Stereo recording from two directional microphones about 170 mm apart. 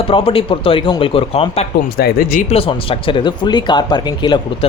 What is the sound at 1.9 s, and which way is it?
Speech, 60° left (ahead or behind).